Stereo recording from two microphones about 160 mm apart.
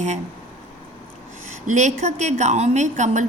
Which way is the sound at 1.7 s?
45° right (ahead or behind).